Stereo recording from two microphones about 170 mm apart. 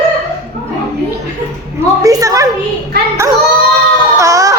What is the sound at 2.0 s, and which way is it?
Speech, 20° right (ahead or behind).